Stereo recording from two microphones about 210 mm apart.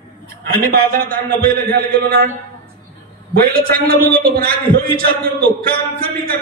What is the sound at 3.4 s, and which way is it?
A man's voice, 45° right (ahead or behind).